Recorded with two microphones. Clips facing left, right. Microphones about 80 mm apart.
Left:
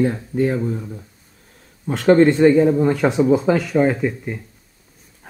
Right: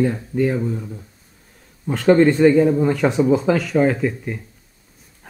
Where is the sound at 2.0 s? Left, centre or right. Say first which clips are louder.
Left 1 dB; centre.